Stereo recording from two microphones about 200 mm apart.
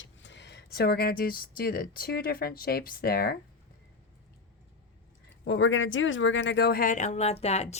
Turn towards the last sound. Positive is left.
turn(degrees=30)  # may be behind; listen again after turning